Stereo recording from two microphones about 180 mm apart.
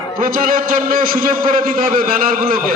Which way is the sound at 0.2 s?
50° right (ahead or behind).